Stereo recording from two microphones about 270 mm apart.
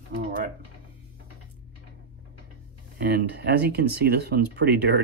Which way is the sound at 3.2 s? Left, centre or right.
Right.